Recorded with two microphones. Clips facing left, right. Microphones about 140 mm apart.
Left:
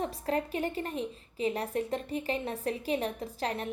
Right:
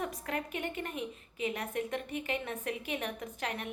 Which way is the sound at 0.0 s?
30° left (ahead or behind).